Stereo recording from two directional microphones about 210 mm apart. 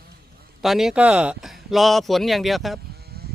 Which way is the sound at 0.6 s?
Centre (ahead or behind).